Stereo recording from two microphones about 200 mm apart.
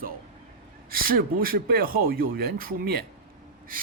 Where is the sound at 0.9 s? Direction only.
45° right (ahead or behind).